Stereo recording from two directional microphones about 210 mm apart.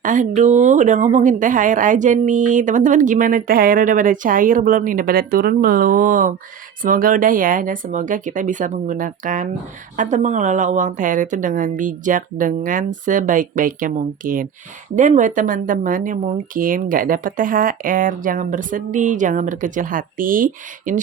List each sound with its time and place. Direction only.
0.0 s speech: 40° right (ahead or behind)